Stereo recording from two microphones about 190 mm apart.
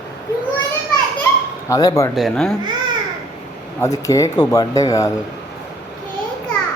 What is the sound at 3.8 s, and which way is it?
Speech, 15° left (ahead or behind).